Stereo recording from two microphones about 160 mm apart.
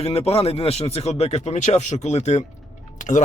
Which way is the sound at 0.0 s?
40° left (ahead or behind).